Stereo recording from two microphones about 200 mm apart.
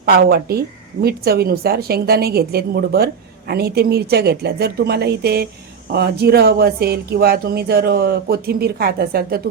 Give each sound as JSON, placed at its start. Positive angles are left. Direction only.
{"t": 0.0, "sound": "speech", "side_deg": -50}